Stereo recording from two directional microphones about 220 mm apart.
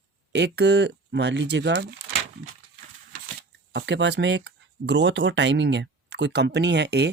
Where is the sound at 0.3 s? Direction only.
50° right (ahead or behind).